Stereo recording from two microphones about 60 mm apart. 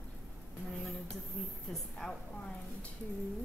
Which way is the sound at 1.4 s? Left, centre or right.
Centre.